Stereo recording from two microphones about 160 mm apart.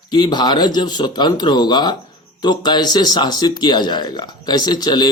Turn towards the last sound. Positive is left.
turn(degrees=25)  # may be behind; listen again after turning